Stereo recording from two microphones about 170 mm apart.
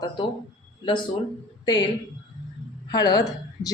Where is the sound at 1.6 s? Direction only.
25° left (ahead or behind).